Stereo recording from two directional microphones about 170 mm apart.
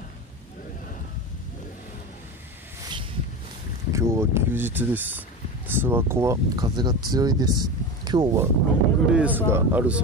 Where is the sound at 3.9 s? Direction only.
15° right (ahead or behind).